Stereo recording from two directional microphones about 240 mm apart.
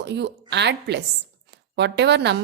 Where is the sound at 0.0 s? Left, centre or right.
Right.